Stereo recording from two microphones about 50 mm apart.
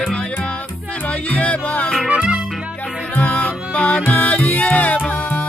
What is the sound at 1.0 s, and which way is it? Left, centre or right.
Music, left.